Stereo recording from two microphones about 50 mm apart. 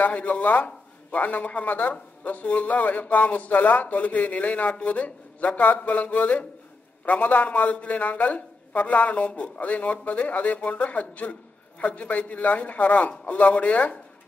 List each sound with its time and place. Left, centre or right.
0.0 s a man's voice: left